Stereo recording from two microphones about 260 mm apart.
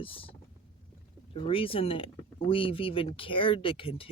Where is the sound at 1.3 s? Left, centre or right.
Left.